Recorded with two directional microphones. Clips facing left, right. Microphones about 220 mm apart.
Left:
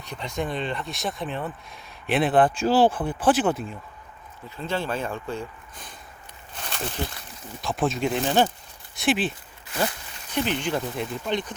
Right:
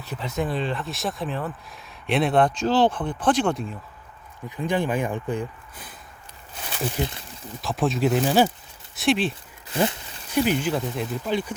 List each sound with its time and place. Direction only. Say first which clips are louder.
0.0 s speech: right 2 dB; 5° right (ahead or behind)
4.4 s speech: right 4 dB; 15° right (ahead or behind)
6.6 s a sound: right 3 dB; 5° right (ahead or behind)
7.6 s speech: right 2 dB; centre (ahead or behind)
9.7 s speech: right 4 dB; 25° right (ahead or behind)
10.3 s speech: right 4 dB; 5° right (ahead or behind)